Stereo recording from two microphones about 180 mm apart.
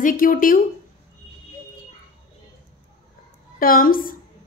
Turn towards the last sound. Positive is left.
turn(degrees=50)  # may be behind; listen again after turning